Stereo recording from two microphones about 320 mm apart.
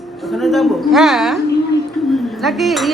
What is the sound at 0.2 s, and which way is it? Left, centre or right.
Speech, centre.